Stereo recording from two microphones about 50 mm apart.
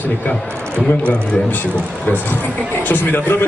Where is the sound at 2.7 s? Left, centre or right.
Left.